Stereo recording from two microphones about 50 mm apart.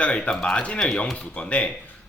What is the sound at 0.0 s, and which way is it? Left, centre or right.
Speech, left.